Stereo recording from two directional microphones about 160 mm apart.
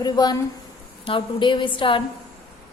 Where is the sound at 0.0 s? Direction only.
25° left (ahead or behind).